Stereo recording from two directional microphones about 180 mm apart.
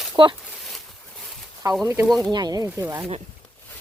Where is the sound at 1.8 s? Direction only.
15° right (ahead or behind).